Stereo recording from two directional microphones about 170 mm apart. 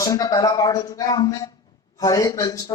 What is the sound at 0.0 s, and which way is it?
Speech, 20° left (ahead or behind).